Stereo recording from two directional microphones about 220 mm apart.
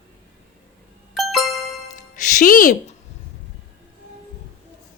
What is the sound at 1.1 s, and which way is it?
Music, centre (ahead or behind).